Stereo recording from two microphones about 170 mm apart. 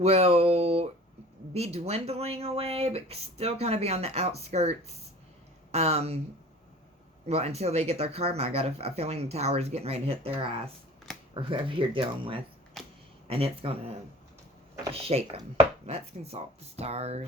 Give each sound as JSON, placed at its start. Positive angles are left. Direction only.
{"t": 0.0, "sound": "speech", "side_deg": -40}
{"t": 7.3, "sound": "speech", "side_deg": -40}
{"t": 12.8, "sound": "a sound", "side_deg": 0}
{"t": 13.2, "sound": "speech", "side_deg": -35}
{"t": 14.9, "sound": "speech", "side_deg": -35}